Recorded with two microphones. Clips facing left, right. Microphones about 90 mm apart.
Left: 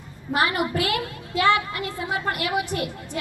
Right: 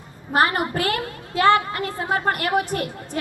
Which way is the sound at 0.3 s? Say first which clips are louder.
Right 3 dB; 40° right (ahead or behind).